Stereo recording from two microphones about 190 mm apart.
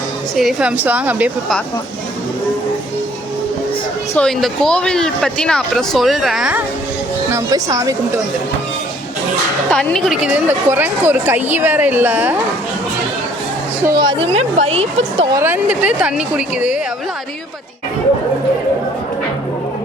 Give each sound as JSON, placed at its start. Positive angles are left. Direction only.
{"t": 0.3, "sound": "a woman's voice", "side_deg": -5}
{"t": 4.1, "sound": "speech", "side_deg": 5}
{"t": 7.3, "sound": "a woman's voice", "side_deg": -15}
{"t": 9.6, "sound": "a woman's voice", "side_deg": 5}
{"t": 13.8, "sound": "a woman's voice", "side_deg": -25}
{"t": 15.4, "sound": "a woman's voice", "side_deg": -10}